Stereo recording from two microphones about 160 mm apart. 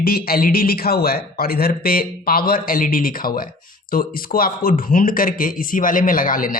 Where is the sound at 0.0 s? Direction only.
70° left (ahead or behind).